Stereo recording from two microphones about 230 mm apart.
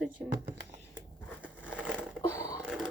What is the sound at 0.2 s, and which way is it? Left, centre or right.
Speech, centre.